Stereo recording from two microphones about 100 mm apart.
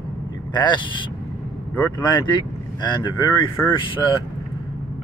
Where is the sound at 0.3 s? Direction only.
45° left (ahead or behind).